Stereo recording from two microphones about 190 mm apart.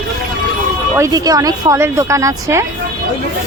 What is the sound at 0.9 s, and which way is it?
Speech, 15° right (ahead or behind).